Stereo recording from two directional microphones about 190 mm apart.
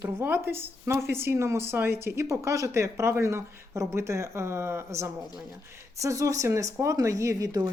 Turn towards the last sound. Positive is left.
turn(degrees=-20)  # may be behind; listen again after turning